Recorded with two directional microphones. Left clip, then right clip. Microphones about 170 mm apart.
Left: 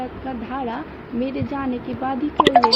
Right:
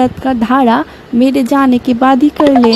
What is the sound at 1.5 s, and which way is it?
Speech, 90° right.